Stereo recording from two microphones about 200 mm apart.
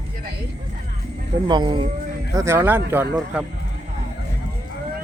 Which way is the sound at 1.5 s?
25° right (ahead or behind).